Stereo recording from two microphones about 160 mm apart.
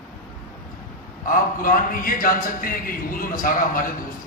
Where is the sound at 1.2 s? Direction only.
60° left (ahead or behind).